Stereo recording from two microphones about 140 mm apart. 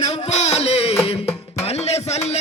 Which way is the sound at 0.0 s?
50° left (ahead or behind).